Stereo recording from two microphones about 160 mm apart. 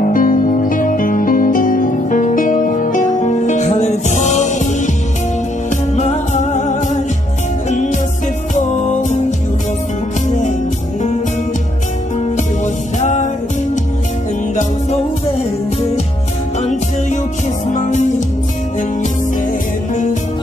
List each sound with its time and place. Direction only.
0.0 s music: 55° left (ahead or behind)
5.9 s music: 45° left (ahead or behind)
13.0 s music: 50° left (ahead or behind)
14.5 s music: 45° left (ahead or behind)
17.6 s music: 50° left (ahead or behind)